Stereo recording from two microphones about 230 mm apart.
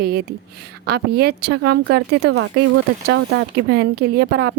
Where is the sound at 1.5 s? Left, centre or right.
Right.